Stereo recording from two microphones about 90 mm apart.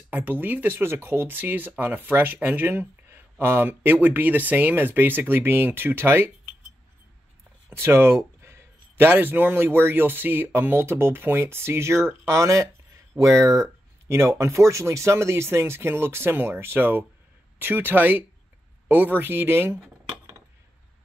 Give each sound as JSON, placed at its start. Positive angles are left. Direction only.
{"t": 0.1, "sound": "speech", "side_deg": -20}
{"t": 7.7, "sound": "speech", "side_deg": -25}